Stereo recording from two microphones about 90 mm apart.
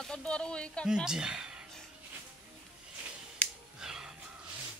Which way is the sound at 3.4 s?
15° left (ahead or behind).